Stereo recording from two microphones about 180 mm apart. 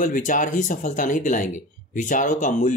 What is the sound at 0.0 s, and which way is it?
Speech, 45° left (ahead or behind).